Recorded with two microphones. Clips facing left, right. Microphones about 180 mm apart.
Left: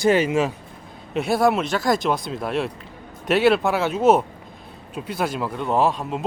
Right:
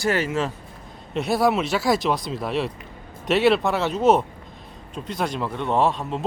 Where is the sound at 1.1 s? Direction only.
Centre (ahead or behind).